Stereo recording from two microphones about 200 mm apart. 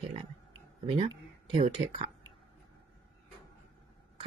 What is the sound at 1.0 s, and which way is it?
Speech, 25° right (ahead or behind).